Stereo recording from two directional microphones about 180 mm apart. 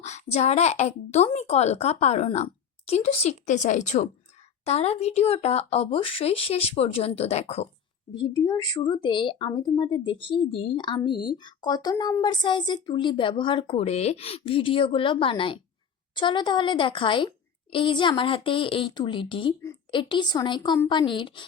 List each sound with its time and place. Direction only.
0.0 s a woman's voice: 40° left (ahead or behind)
8.2 s a woman's voice: 20° left (ahead or behind)